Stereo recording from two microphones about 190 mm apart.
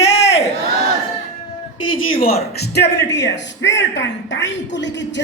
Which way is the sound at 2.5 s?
60° left (ahead or behind).